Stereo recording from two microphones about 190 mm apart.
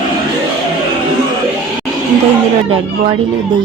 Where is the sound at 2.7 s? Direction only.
25° right (ahead or behind).